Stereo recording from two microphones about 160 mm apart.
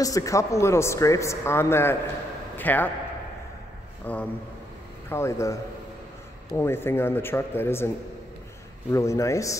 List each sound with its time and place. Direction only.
0.0 s a man's voice: 20° left (ahead or behind)
4.0 s a man's voice: 10° left (ahead or behind)
8.9 s speech: 20° left (ahead or behind)